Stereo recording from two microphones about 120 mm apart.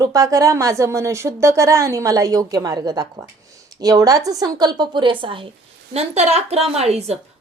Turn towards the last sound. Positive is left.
turn(degrees=-60)  # may be behind; listen again after turning